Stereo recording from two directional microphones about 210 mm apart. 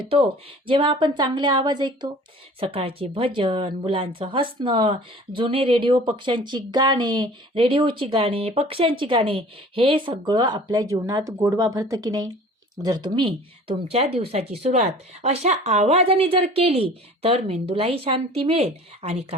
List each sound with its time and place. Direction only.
0.0 s speech: 25° right (ahead or behind)